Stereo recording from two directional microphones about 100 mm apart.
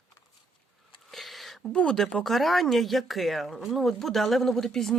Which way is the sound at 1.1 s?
Centre (ahead or behind).